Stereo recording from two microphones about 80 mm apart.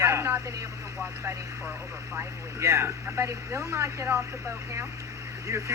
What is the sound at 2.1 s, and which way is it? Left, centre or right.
Speech, right.